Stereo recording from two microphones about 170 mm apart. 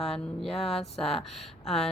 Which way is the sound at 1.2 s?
Centre (ahead or behind).